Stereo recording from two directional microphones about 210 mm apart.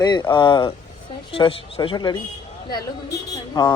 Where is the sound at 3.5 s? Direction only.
20° left (ahead or behind).